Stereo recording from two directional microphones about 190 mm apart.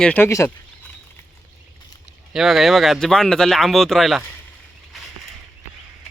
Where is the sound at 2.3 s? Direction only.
Centre (ahead or behind).